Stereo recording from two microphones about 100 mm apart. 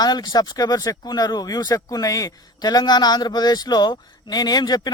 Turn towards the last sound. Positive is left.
turn(degrees=45)  # may be behind; listen again after turning